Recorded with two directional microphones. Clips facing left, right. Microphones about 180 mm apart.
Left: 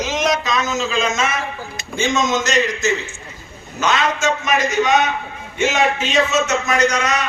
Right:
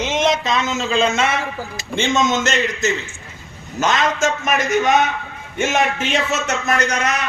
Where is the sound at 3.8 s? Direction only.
45° right (ahead or behind).